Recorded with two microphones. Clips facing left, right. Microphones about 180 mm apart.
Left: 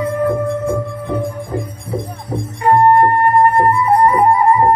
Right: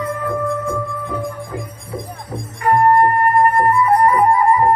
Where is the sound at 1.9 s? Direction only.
65° left (ahead or behind).